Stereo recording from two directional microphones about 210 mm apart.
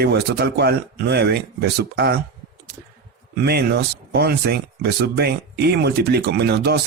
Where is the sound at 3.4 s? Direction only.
50° right (ahead or behind).